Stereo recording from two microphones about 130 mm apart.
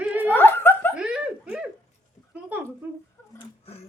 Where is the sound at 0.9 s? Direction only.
5° right (ahead or behind).